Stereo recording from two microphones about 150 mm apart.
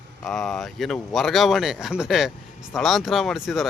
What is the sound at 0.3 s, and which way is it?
Speech, 5° left (ahead or behind).